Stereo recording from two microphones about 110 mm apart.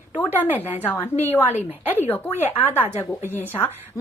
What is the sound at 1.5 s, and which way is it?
Speech, 90° left.